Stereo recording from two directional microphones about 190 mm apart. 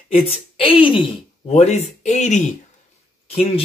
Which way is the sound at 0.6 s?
30° left (ahead or behind).